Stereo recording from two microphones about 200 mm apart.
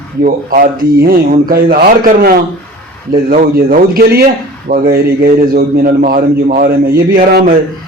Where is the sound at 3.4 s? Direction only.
45° right (ahead or behind).